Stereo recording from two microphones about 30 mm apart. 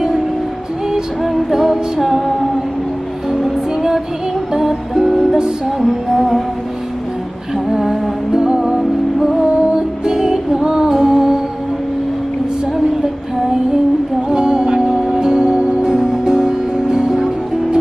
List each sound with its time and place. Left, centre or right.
1.2 s music: centre
3.3 s music: centre
5.8 s music: centre
8.3 s music: right
13.0 s female singing: centre
14.3 s music: right
15.6 s music: right
15.9 s music: right